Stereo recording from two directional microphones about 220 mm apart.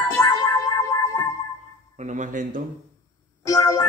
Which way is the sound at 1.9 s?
35° right (ahead or behind).